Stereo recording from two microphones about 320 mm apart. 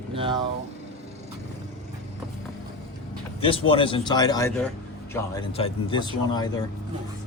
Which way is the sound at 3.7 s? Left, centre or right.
Centre.